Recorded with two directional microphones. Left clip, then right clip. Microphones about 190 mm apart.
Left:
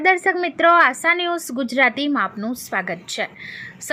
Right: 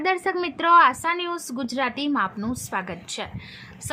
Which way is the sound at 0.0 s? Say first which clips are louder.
Left 6 dB; 10° left (ahead or behind).